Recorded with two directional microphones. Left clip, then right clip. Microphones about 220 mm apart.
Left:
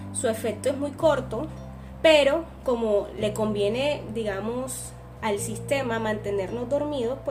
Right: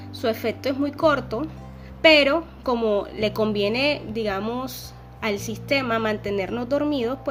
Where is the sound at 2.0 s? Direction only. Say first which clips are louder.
Right 2 dB; 30° right (ahead or behind).